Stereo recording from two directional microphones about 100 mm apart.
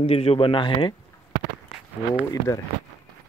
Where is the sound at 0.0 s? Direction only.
85° left; by 0.9 s 55° left (ahead or behind).